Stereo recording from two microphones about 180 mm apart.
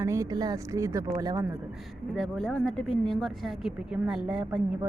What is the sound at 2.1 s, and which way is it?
Speech, centre (ahead or behind).